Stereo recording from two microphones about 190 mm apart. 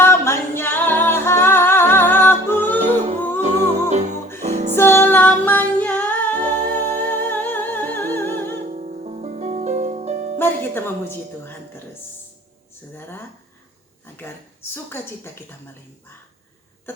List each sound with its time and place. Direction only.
0.0 s music: 10° left (ahead or behind)
2.7 s music: 40° right (ahead or behind)
3.2 s music: 10° left (ahead or behind)
3.4 s music: 35° right (ahead or behind)
4.7 s music: 10° left (ahead or behind)
8.7 s music: 40° right (ahead or behind)
10.3 s music: 10° left (ahead or behind)
12.9 s a sound: 10° left (ahead or behind)
14.2 s speech: 10° left (ahead or behind)